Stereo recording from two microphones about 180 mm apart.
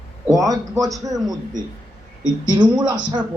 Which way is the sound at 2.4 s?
25° right (ahead or behind).